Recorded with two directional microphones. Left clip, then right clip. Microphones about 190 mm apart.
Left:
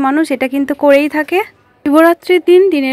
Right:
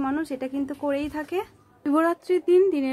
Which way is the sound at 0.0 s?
30° left (ahead or behind).